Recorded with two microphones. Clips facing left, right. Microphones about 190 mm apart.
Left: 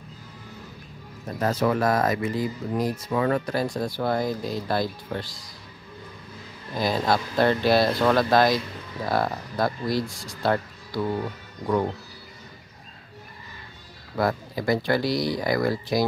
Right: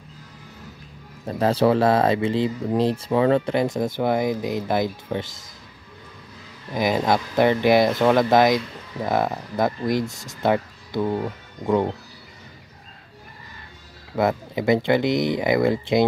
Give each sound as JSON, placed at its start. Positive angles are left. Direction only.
{"t": 1.2, "sound": "speech", "side_deg": -30}
{"t": 6.7, "sound": "speech", "side_deg": -15}
{"t": 14.1, "sound": "speech", "side_deg": -20}